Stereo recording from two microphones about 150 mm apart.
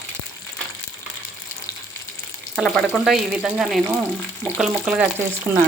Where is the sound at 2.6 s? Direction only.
5° left (ahead or behind).